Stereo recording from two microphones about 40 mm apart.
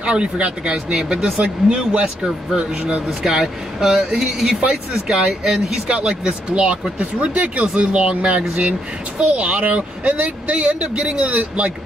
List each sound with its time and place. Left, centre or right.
0.0 s speech: right
3.3 s speech: centre
6.5 s speech: right